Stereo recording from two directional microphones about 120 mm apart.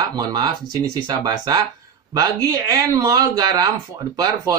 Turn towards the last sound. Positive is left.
turn(degrees=-30)  # may be behind; listen again after turning